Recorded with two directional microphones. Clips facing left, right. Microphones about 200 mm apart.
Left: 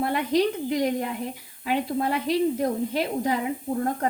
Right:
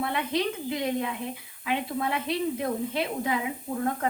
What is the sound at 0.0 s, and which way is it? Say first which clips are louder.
Speech: left 5 dB; 45° left (ahead or behind).